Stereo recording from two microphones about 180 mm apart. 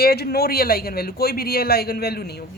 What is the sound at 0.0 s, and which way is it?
A woman's voice, 60° left (ahead or behind).